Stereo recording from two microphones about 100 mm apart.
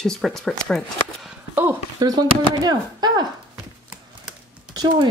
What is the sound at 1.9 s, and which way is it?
Speech, 45° right (ahead or behind).